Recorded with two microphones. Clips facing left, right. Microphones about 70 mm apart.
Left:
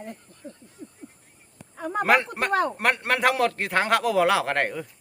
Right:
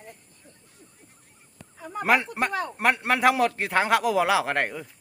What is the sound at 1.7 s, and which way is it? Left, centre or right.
Speech, left.